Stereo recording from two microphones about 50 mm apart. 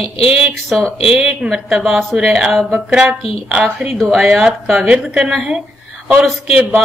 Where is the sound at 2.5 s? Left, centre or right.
Centre.